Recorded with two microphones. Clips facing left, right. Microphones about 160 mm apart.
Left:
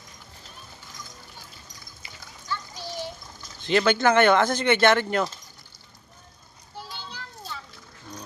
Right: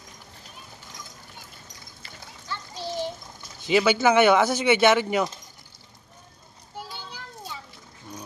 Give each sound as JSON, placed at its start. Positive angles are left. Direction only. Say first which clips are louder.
{"t": 2.5, "sound": "children playing", "louder": "right 1 dB", "side_deg": -25}
{"t": 3.6, "sound": "speech", "louder": "right 1 dB", "side_deg": -10}
{"t": 6.7, "sound": "children playing", "louder": "right 1 dB", "side_deg": -10}